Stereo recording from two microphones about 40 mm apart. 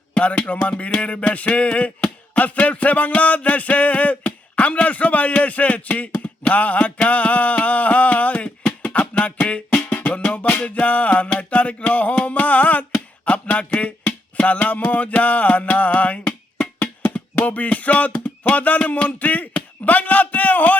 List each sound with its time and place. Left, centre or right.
0.3 s a man's voice: left
8.8 s a sound: left
10.2 s a man's voice: left
11.3 s music: left
15.7 s a man's voice: left
17.2 s music: left